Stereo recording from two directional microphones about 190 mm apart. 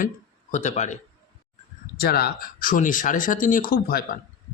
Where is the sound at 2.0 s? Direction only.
55° left (ahead or behind).